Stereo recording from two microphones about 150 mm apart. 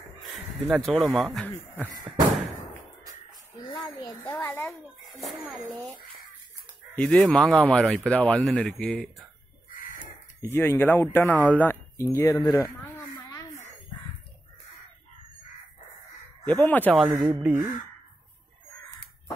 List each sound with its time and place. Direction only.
0.7 s speech: centre (ahead or behind)
1.9 s a sound: 25° right (ahead or behind)
3.7 s a child's voice: 5° left (ahead or behind)
7.0 s speech: 5° left (ahead or behind)
9.7 s a sound: 65° left (ahead or behind)
10.4 s speech: 15° left (ahead or behind)
13.2 s a sound: 25° left (ahead or behind)
16.4 s speech: 10° left (ahead or behind)
16.9 s speech: 5° right (ahead or behind)